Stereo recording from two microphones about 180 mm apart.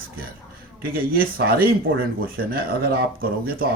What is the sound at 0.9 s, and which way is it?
Speech, 55° right (ahead or behind).